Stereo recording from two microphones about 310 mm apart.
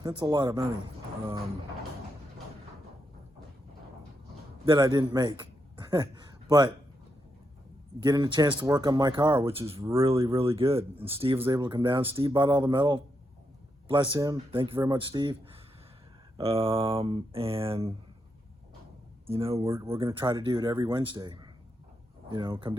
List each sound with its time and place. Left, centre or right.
0.0 s speech: centre
4.6 s a man's voice: centre
8.0 s speech: centre
16.4 s speech: centre
19.3 s speech: centre